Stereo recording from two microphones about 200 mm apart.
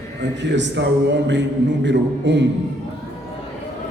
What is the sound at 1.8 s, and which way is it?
Speech, 60° right (ahead or behind).